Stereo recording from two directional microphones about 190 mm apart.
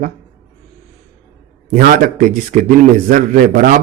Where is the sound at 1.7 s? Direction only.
45° right (ahead or behind).